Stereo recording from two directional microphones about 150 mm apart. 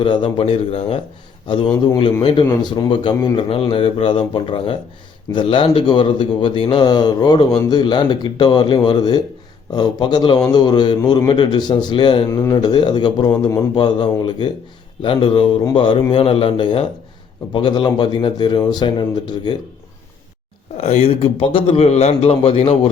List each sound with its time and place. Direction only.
0.0 s a man's voice: 35° left (ahead or behind)
20.7 s speech: 45° left (ahead or behind)